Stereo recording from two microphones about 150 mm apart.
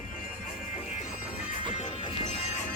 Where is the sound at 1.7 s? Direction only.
45° left (ahead or behind).